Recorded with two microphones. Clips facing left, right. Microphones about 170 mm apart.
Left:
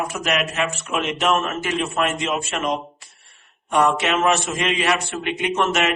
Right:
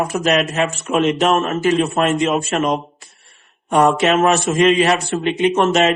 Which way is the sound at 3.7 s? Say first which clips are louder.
Right 5 dB; 40° right (ahead or behind).